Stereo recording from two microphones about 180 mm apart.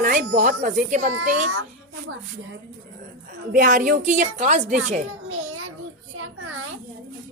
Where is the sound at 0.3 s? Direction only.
40° right (ahead or behind).